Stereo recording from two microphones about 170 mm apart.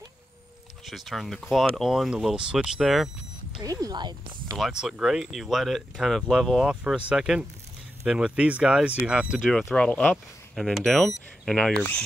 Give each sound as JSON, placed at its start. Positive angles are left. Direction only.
{"t": 0.8, "sound": "speech", "side_deg": 0}
{"t": 3.5, "sound": "speech", "side_deg": -20}
{"t": 4.6, "sound": "speech", "side_deg": 0}